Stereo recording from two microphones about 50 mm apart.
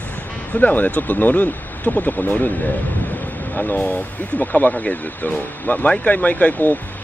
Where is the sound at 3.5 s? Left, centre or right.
Left.